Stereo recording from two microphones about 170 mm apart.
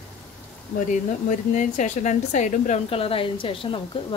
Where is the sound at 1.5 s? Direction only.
45° left (ahead or behind); by 4.0 s 30° left (ahead or behind).